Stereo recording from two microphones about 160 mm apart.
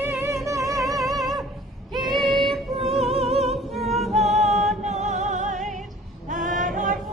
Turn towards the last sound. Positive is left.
turn(degrees=-55)  # may be behind; listen again after turning